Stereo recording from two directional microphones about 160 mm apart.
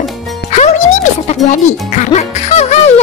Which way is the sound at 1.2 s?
45° left (ahead or behind).